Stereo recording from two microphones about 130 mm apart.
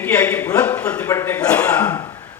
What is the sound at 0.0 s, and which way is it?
A man's voice, 10° left (ahead or behind).